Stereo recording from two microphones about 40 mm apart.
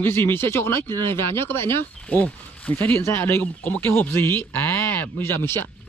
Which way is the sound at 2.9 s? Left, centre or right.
Left.